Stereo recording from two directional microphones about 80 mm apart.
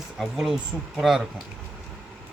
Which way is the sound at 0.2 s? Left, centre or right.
Centre.